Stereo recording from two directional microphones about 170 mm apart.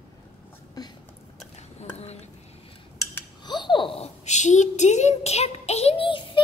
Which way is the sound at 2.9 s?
20° left (ahead or behind).